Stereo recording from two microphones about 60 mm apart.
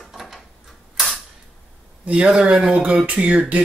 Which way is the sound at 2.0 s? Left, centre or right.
Centre.